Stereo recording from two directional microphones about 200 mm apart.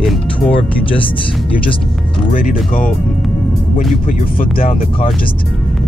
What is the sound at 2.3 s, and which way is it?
Speech, 40° left (ahead or behind).